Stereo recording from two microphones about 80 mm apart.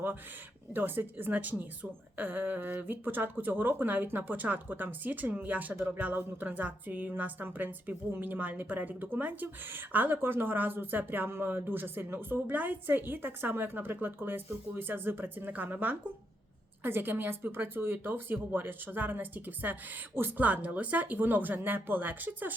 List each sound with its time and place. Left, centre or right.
0.7 s a woman's voice: right